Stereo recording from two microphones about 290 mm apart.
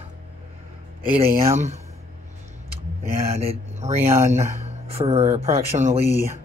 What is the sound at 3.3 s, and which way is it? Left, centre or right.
Speech, right.